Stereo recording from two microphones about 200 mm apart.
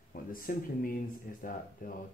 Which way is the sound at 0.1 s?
45° left (ahead or behind).